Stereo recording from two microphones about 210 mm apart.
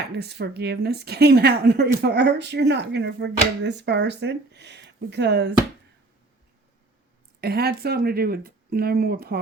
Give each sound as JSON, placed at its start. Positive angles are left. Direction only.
{"t": 0.2, "sound": "speech", "side_deg": -50}
{"t": 7.4, "sound": "speech", "side_deg": -50}